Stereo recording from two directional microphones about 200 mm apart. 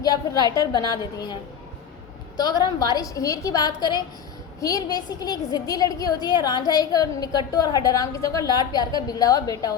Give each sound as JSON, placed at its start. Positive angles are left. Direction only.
{"t": 0.0, "sound": "a woman's voice", "side_deg": 20}